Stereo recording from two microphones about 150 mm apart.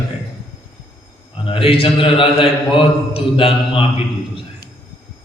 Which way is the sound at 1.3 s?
35° left (ahead or behind).